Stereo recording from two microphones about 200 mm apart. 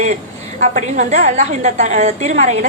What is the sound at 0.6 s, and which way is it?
A woman's voice, 35° right (ahead or behind).